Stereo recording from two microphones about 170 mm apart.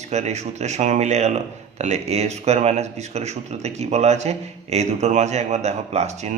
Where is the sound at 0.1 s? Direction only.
40° right (ahead or behind).